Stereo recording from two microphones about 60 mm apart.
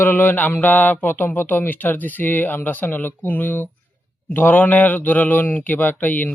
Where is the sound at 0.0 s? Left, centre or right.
Left.